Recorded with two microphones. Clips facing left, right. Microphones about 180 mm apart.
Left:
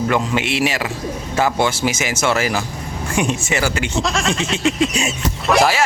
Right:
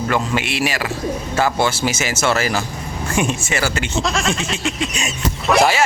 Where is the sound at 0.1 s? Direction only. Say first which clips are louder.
Left 1 dB; 20° left (ahead or behind).